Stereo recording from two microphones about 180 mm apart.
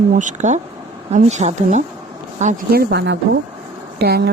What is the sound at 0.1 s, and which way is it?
Speech, 45° right (ahead or behind).